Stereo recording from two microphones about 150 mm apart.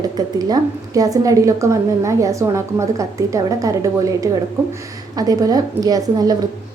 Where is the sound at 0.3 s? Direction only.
25° right (ahead or behind).